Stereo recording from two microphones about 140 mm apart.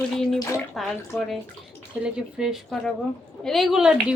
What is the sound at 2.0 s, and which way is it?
A woman's voice, 5° right (ahead or behind).